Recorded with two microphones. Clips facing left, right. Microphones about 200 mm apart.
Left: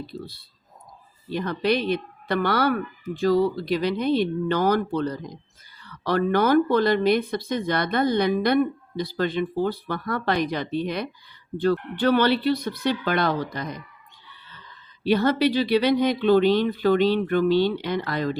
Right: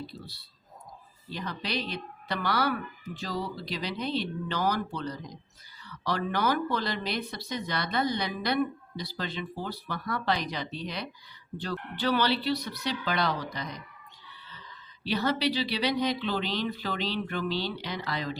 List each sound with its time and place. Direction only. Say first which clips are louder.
0.1 s speech: left 9 dB; 50° left (ahead or behind)
15.0 s speech: left 8 dB; 55° left (ahead or behind)